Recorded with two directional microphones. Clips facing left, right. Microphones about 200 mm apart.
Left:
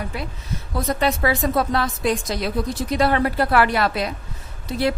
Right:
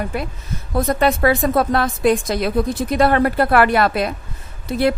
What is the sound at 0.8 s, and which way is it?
A woman's voice, 55° right (ahead or behind).